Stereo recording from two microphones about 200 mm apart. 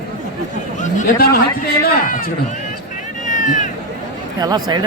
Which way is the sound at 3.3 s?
40° left (ahead or behind).